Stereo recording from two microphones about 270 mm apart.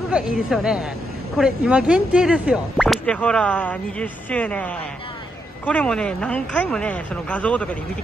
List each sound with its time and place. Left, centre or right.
0.1 s speech: centre